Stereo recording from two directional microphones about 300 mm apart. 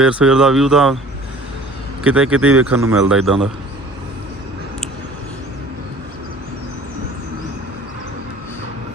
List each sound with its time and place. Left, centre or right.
0.0 s a man's voice: centre
2.0 s a man's voice: centre